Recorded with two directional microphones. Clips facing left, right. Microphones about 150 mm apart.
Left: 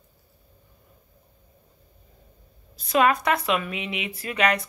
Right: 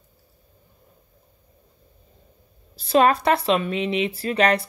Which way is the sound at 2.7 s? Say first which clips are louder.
Right 3 dB; 30° right (ahead or behind).